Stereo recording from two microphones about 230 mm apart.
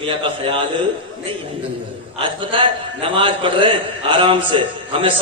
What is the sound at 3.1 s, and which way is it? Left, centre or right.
A man's voice, right.